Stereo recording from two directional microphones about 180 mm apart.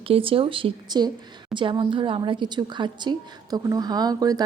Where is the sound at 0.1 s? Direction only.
30° right (ahead or behind).